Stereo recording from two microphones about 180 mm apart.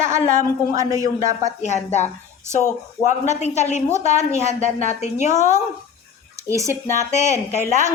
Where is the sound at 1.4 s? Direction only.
40° left (ahead or behind).